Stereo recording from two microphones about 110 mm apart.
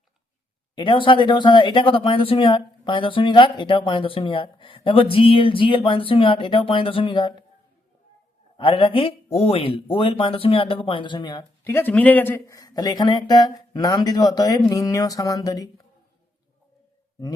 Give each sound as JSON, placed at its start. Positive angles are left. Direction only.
{"t": 0.8, "sound": "speech", "side_deg": 45}
{"t": 8.5, "sound": "speech", "side_deg": 55}
{"t": 11.6, "sound": "a man's voice", "side_deg": 20}
{"t": 12.5, "sound": "speech", "side_deg": 35}